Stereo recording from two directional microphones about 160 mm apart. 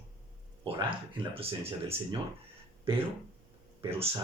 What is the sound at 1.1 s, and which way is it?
Speech, 35° right (ahead or behind).